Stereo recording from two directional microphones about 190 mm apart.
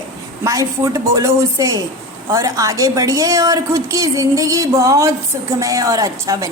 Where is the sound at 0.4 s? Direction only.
15° right (ahead or behind).